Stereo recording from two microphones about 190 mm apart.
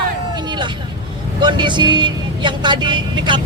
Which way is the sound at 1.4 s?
25° right (ahead or behind).